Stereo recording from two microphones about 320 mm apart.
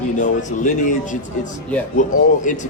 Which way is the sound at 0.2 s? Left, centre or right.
Left.